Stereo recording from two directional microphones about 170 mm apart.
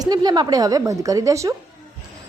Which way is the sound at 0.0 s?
25° right (ahead or behind).